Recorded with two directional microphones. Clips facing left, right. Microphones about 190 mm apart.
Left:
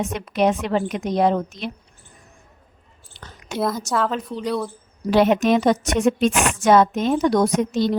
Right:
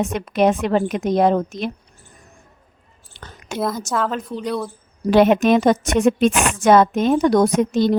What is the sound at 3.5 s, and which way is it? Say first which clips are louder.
A woman's voice: even; centre (ahead or behind).